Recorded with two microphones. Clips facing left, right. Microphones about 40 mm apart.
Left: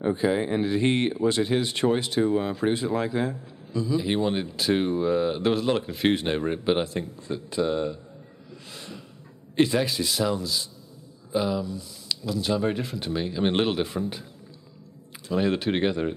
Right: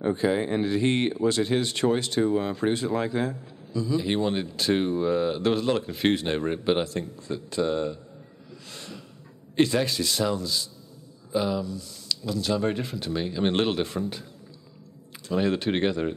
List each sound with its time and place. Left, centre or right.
0.0 s speech: centre
3.3 s a man's voice: centre
3.9 s speech: centre
6.8 s speech: centre
8.6 s snort: centre
9.6 s speech: centre
11.6 s speech: centre
12.6 s speech: centre
15.2 s speech: centre